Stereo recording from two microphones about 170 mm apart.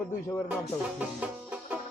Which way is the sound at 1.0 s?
10° right (ahead or behind).